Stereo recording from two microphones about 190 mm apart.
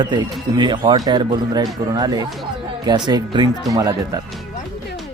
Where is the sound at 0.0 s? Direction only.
20° right (ahead or behind).